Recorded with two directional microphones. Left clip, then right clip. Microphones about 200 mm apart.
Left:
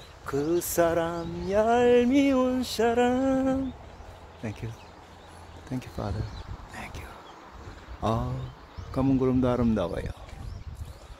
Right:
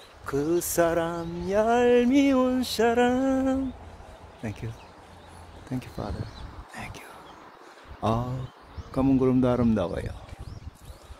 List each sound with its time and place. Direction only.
0.3 s speech: 5° right (ahead or behind)
6.7 s a sound: 10° right (ahead or behind)
8.0 s speech: 15° right (ahead or behind)